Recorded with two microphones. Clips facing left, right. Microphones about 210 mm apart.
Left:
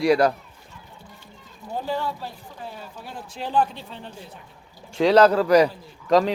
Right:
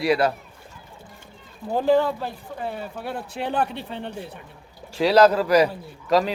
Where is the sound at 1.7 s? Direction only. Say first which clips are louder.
Right 9 dB; 90° right; by 4.3 s 65° right (ahead or behind).